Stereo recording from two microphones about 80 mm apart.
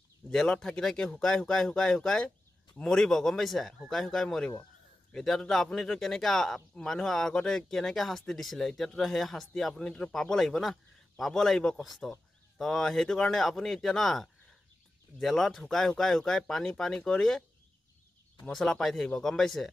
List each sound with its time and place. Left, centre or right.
0.3 s speech: centre
18.5 s speech: centre